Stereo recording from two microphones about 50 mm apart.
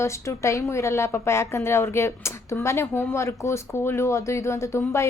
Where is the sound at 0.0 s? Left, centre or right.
Left.